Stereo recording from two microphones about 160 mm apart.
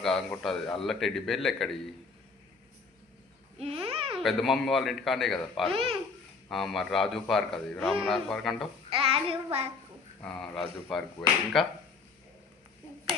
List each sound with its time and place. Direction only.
0.0 s a man's voice: centre (ahead or behind)
3.6 s babbling: 40° right (ahead or behind)
4.2 s a man's voice: centre (ahead or behind)
8.9 s child singing: 35° right (ahead or behind)
10.2 s a man's voice: 5° left (ahead or behind)